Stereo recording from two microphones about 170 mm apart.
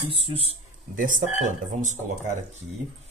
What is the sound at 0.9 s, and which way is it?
Speech, 50° right (ahead or behind).